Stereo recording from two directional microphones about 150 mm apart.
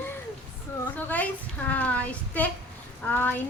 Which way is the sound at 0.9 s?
10° left (ahead or behind).